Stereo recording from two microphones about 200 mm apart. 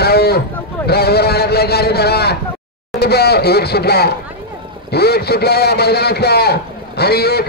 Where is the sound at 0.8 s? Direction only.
50° left (ahead or behind).